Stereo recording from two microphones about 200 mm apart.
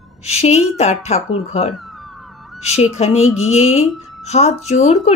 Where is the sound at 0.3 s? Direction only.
35° left (ahead or behind).